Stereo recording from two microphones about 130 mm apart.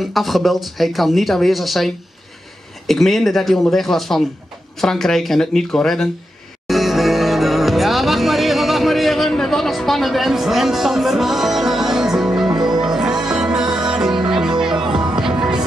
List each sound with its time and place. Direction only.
0.0 s speech: centre (ahead or behind)
6.7 s music: centre (ahead or behind)
14.1 s music: 35° right (ahead or behind)
15.2 s music: 5° right (ahead or behind)